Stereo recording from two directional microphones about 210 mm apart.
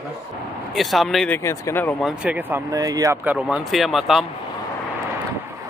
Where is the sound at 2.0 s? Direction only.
5° right (ahead or behind).